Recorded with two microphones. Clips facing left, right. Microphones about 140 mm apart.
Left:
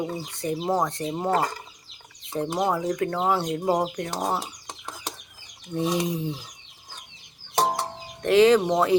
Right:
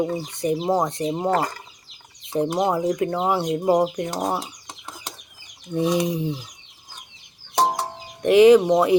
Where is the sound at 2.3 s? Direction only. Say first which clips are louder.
Right 4 dB; 15° right (ahead or behind).